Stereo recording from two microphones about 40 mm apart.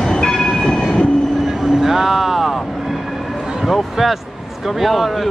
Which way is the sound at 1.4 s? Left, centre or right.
Centre.